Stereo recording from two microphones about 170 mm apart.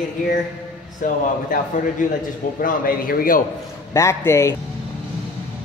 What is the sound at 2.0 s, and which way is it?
A man's voice, 50° left (ahead or behind).